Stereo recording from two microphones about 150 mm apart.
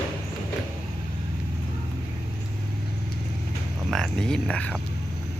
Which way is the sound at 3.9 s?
5° left (ahead or behind).